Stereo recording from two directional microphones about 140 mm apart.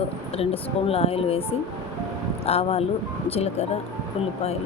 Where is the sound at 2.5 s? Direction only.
45° left (ahead or behind).